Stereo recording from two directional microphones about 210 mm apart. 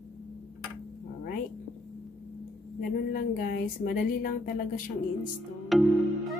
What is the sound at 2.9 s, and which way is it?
A woman's voice, 45° left (ahead or behind).